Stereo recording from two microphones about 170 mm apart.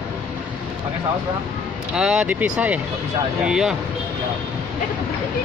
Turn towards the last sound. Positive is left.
turn(degrees=-5)  # may be behind; listen again after turning